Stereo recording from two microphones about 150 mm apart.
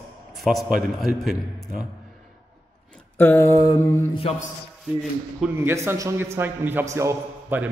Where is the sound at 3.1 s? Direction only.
15° left (ahead or behind).